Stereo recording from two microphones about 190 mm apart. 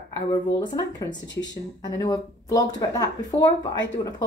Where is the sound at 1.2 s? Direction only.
70° left (ahead or behind).